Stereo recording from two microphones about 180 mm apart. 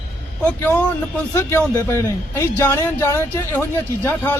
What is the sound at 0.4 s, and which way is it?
A man's voice, 10° left (ahead or behind).